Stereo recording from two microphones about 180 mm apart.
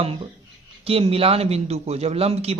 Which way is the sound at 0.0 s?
35° right (ahead or behind).